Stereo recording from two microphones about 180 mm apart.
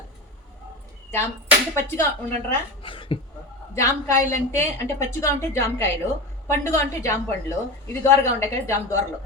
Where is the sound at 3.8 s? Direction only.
15° left (ahead or behind).